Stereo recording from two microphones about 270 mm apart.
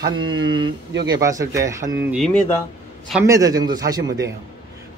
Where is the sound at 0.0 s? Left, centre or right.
Centre.